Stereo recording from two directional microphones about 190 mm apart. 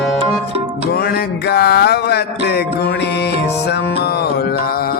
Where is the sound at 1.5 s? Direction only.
55° left (ahead or behind).